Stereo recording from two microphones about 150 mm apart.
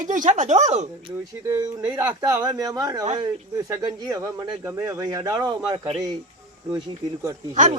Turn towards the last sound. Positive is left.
turn(degrees=-50)  # may be behind; listen again after turning